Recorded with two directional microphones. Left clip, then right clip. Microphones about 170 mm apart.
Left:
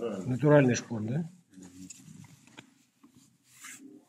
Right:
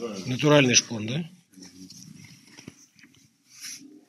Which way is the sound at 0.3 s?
5° left (ahead or behind).